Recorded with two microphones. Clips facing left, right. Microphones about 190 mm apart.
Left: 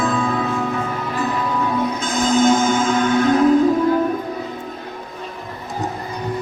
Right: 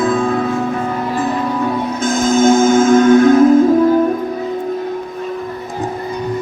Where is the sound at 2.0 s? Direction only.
45° right (ahead or behind).